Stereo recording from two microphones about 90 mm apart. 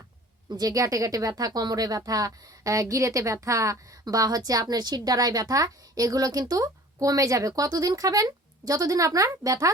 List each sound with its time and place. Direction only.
0.5 s speech: 40° right (ahead or behind)